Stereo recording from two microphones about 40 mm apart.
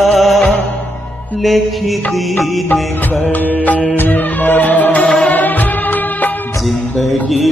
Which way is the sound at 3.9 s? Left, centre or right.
Left.